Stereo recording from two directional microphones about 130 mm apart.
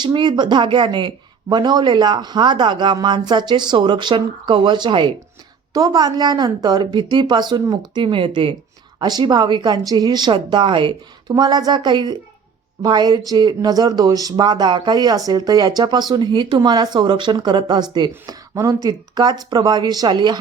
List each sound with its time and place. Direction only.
0.0 s speech: 35° right (ahead or behind)
9.0 s speech: 30° right (ahead or behind)